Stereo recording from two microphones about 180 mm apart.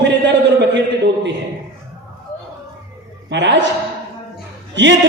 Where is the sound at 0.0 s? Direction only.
80° right.